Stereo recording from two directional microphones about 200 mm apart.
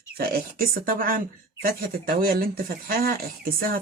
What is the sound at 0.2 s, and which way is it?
Speech, 45° right (ahead or behind).